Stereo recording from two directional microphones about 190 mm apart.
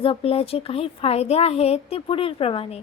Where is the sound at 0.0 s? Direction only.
30° left (ahead or behind).